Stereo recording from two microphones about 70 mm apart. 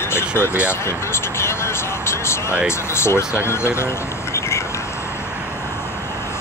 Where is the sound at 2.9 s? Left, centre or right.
Left.